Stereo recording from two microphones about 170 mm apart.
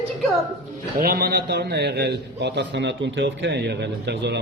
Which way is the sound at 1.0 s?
65° right (ahead or behind).